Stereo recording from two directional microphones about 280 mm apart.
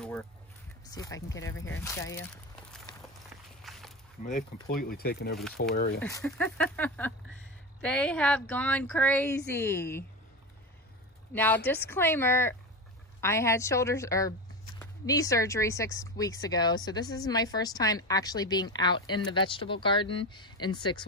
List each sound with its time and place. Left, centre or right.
0.8 s speech: centre
2.9 s walk: centre
3.6 s walk: centre
4.2 s speech: left
5.9 s speech: centre
11.3 s speech: centre